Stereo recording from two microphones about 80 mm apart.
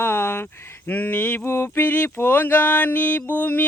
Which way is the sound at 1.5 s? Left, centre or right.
Left.